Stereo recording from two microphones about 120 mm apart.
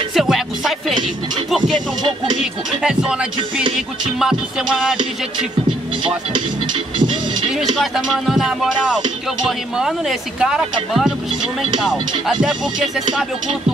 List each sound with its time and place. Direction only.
0.1 s music: centre (ahead or behind)
2.8 s music: 5° right (ahead or behind)
4.2 s speech: 5° right (ahead or behind)
6.0 s speech: 40° right (ahead or behind)
7.8 s speech: centre (ahead or behind)
9.8 s speech: 5° right (ahead or behind)
11.6 s speech: 40° right (ahead or behind)
12.3 s speech: 5° right (ahead or behind)